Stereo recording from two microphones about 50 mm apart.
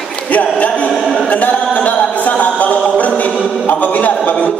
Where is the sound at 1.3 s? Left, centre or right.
Left.